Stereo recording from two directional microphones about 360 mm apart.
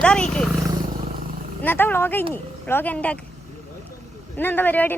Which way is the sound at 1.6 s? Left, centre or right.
Centre.